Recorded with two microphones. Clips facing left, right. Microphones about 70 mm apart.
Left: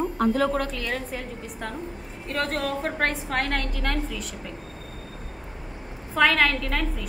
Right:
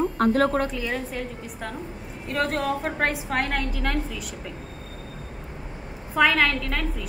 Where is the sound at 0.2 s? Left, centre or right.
Right.